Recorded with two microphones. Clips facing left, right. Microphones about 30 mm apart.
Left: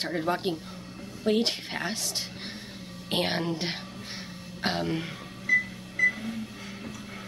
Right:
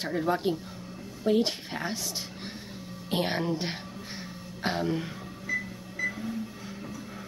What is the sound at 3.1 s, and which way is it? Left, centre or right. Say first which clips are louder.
Speech: left 1 dB; left.